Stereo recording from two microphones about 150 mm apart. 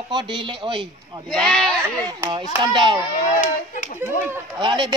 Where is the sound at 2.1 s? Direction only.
30° right (ahead or behind).